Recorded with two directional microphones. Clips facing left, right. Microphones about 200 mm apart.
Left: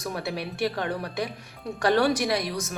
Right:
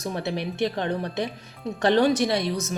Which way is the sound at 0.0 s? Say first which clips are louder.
Right 3 dB; 25° right (ahead or behind).